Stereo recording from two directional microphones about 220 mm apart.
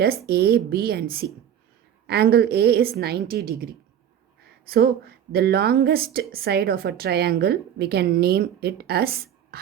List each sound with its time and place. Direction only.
0.0 s speech: 45° right (ahead or behind)